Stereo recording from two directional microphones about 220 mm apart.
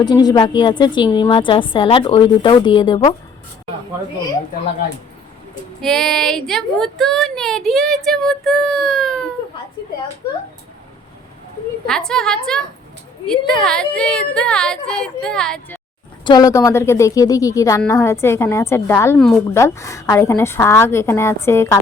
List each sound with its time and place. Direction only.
0.0 s a woman's voice: 20° left (ahead or behind)
5.8 s speech: centre (ahead or behind)
11.9 s speech: 5° left (ahead or behind)
16.2 s a woman's voice: 20° left (ahead or behind)